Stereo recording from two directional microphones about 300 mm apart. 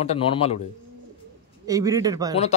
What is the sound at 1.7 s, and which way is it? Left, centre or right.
Speech, centre.